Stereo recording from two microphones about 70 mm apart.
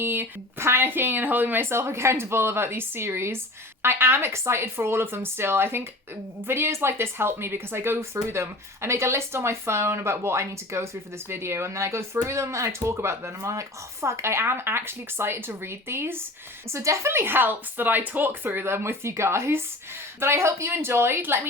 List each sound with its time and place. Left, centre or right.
0.0 s speech: right
1.7 s a woman's voice: right
17.1 s speech: right